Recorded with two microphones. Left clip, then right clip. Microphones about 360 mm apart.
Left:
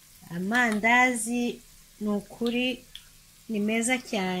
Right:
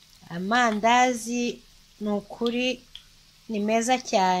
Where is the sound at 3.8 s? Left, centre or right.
Centre.